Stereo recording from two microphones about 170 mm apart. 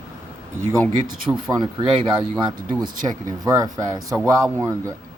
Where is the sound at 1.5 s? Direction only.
25° right (ahead or behind).